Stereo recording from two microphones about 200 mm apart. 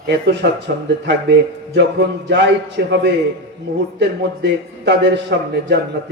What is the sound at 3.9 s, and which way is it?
A man's voice, 60° right (ahead or behind).